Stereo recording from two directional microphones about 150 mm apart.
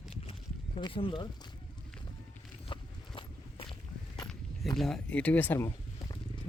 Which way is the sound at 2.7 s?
35° left (ahead or behind).